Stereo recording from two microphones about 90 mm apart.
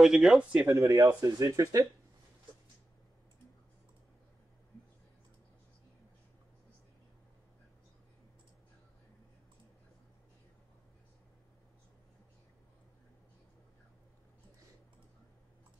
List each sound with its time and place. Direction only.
0.0 s speech: 5° right (ahead or behind)
0.7 s speech: 45° right (ahead or behind)